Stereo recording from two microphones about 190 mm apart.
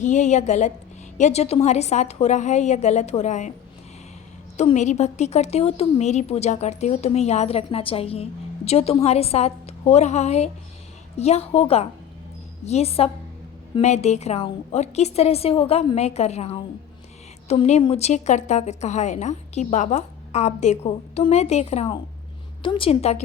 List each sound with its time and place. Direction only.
0.0 s a woman's voice: 40° left (ahead or behind)
4.5 s a woman's voice: 35° left (ahead or behind)